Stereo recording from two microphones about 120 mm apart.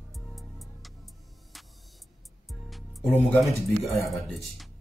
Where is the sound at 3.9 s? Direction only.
Centre (ahead or behind).